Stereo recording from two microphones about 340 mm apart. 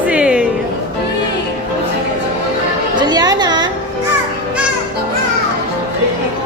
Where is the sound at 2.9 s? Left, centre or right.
Centre.